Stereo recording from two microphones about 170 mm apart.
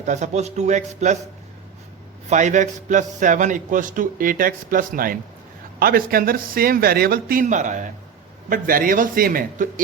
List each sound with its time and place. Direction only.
0.0 s a man's voice: 45° right (ahead or behind)
2.3 s a man's voice: 45° right (ahead or behind)